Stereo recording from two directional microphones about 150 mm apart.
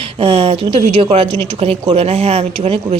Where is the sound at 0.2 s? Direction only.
40° right (ahead or behind).